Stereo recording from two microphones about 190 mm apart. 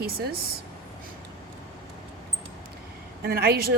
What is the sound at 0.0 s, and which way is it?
Speech, 55° right (ahead or behind).